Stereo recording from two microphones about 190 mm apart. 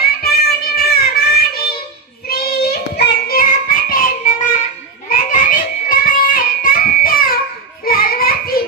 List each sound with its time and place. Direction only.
0.2 s music: 50° left (ahead or behind)
2.2 s child singing: 55° left (ahead or behind)